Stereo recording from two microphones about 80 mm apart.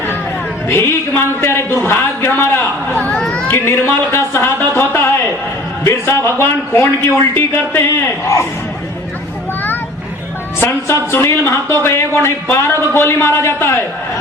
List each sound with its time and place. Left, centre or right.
0.7 s a man's voice: left
3.2 s a sound: centre
3.5 s speech: left
10.6 s speech: left